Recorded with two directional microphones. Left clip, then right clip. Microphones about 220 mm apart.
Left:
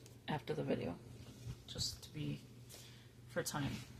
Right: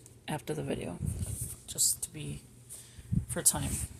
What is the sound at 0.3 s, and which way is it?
Speech, 45° right (ahead or behind).